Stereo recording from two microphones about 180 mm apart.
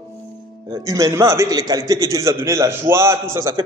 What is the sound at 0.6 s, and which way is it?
A man's voice, 20° right (ahead or behind).